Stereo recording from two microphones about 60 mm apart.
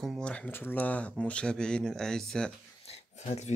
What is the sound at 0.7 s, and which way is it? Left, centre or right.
Speech, left.